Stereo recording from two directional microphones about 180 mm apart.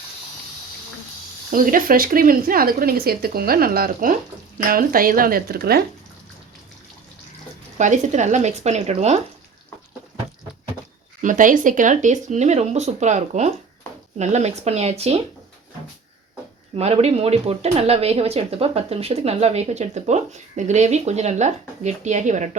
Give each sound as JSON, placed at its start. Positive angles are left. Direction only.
{"t": 1.5, "sound": "speech", "side_deg": -50}
{"t": 7.8, "sound": "speech", "side_deg": -40}
{"t": 11.2, "sound": "speech", "side_deg": -45}
{"t": 16.7, "sound": "speech", "side_deg": -35}